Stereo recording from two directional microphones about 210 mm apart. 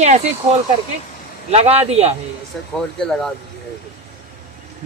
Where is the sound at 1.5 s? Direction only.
30° right (ahead or behind).